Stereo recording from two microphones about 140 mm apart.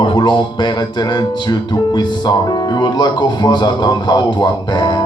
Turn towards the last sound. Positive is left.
turn(degrees=30)  # may be behind; listen again after turning